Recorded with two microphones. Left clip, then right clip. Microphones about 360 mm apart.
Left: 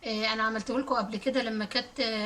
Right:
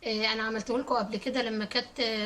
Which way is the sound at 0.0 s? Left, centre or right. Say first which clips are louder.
Left 1 dB; centre.